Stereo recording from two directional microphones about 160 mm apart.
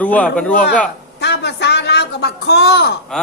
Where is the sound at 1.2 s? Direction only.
90° left.